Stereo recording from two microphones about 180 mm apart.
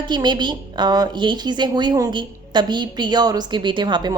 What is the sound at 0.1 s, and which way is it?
A woman's voice, 25° right (ahead or behind).